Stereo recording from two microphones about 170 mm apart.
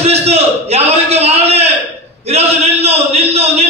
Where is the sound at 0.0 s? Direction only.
40° right (ahead or behind).